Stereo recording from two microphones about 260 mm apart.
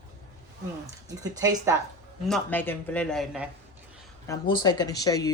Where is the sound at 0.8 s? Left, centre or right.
Centre.